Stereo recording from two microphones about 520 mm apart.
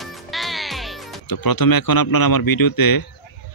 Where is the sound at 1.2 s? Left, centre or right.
Left.